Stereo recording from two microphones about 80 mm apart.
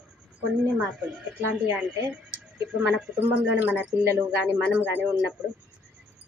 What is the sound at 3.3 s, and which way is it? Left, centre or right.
Speech, centre.